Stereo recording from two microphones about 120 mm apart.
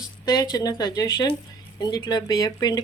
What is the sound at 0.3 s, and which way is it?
Speech, 30° left (ahead or behind).